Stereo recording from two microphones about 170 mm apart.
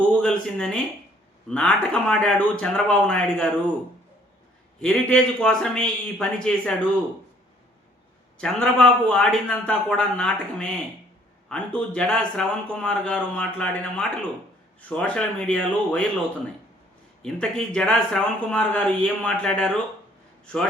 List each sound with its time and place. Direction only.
0.2 s speech: 5° left (ahead or behind)
4.8 s speech: 5° left (ahead or behind)
8.4 s a man's voice: 5° left (ahead or behind)
17.2 s a man's voice: 5° left (ahead or behind)